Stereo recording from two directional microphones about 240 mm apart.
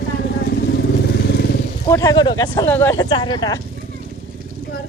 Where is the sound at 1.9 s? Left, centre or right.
Centre.